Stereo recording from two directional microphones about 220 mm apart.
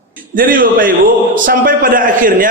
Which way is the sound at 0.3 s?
40° right (ahead or behind).